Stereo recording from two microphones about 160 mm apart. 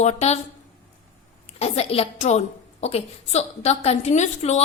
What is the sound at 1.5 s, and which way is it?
A woman's voice, 40° left (ahead or behind).